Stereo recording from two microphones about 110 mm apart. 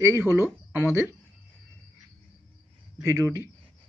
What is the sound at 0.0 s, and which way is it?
Speech, 20° right (ahead or behind).